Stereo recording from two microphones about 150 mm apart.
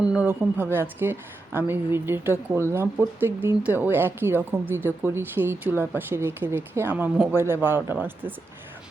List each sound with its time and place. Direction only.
0.0 s a woman's voice: 10° right (ahead or behind)